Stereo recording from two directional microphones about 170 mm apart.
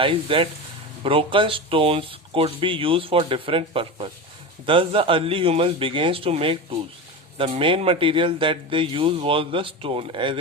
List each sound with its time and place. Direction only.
0.0 s speech: 30° right (ahead or behind)